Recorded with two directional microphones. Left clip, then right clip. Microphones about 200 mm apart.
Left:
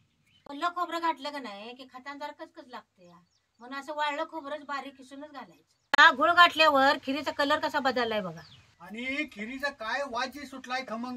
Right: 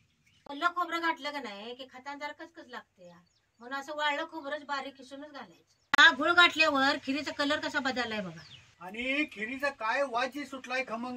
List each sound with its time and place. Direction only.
0.5 s a woman's voice: 5° right (ahead or behind)
5.9 s speech: 20° left (ahead or behind)
8.9 s speech: 10° right (ahead or behind)